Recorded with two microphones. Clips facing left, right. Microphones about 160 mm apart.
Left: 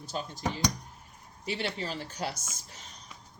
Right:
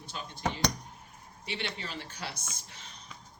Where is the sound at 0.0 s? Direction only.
40° left (ahead or behind).